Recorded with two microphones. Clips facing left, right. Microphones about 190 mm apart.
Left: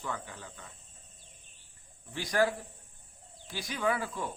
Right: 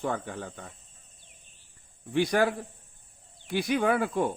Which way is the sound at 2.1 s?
60° right (ahead or behind).